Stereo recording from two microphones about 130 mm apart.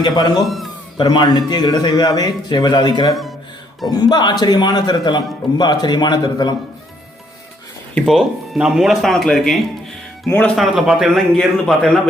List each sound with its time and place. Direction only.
0.0 s a man's voice: 30° left (ahead or behind)
0.4 s speech: centre (ahead or behind)
0.9 s a man's voice: 40° left (ahead or behind)
7.9 s speech: centre (ahead or behind)
10.6 s speech: 5° right (ahead or behind)